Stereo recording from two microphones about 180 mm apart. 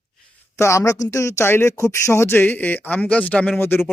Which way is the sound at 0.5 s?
15° left (ahead or behind).